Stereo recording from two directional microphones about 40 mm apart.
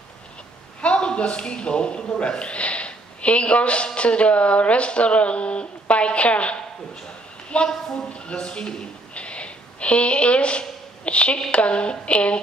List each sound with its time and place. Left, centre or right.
0.8 s a man's voice: left